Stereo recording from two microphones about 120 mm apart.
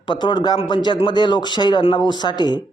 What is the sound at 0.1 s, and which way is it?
Speech, 40° left (ahead or behind).